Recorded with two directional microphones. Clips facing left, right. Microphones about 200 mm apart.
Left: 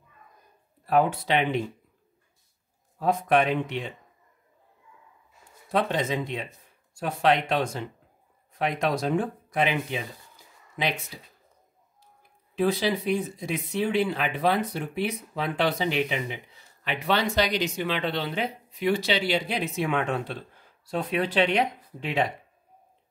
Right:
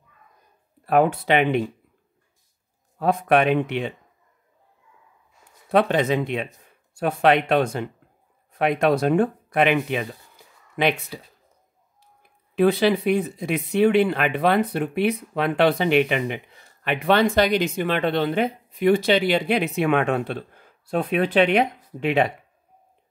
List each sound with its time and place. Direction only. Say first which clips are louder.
0.8 s speech: right 4 dB; 60° right (ahead or behind)
3.0 s speech: right 4 dB; 65° right (ahead or behind)
5.7 s speech: right 6 dB; 65° right (ahead or behind)
12.5 s speech: right 6 dB; 60° right (ahead or behind)